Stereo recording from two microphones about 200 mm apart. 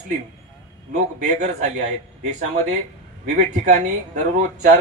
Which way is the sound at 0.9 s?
35° right (ahead or behind).